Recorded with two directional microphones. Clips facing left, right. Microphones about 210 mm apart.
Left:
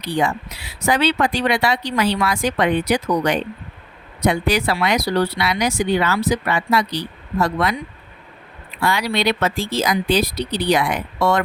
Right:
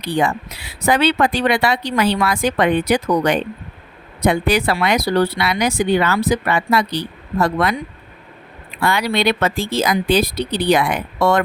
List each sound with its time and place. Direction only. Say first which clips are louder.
0.0 s speech: right 2 dB; 55° right (ahead or behind)
8.8 s speech: right 2 dB; 55° right (ahead or behind)